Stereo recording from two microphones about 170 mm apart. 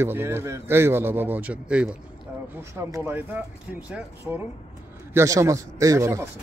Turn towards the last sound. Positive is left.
turn(degrees=-15)  # may be behind; listen again after turning